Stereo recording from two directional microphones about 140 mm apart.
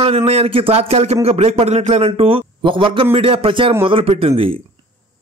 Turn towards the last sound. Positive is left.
turn(degrees=-40)  # may be behind; listen again after turning